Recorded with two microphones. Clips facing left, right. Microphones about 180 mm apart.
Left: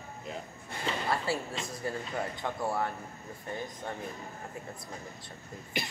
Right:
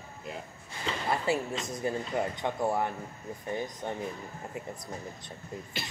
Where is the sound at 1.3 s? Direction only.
20° right (ahead or behind).